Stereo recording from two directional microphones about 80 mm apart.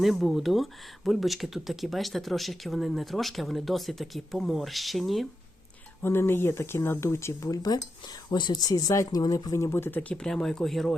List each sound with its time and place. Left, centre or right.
0.0 s speech: centre
6.0 s speech: left
7.5 s speech: left
8.3 s speech: left
10.0 s speech: centre